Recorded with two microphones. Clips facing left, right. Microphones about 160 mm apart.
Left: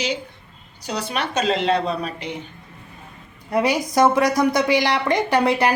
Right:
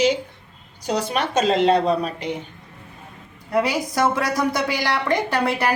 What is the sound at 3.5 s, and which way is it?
A woman's voice, 20° left (ahead or behind).